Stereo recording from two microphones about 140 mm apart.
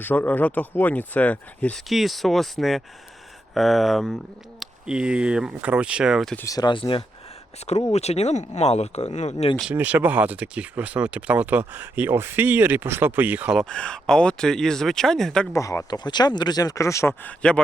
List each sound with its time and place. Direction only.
0.0 s speech: 15° left (ahead or behind)
1.9 s speech: centre (ahead or behind)
6.3 s speech: 25° left (ahead or behind)
7.6 s speech: 50° left (ahead or behind)
9.7 s speech: 10° right (ahead or behind)
13.6 s speech: 5° left (ahead or behind)
15.5 s speech: 20° left (ahead or behind)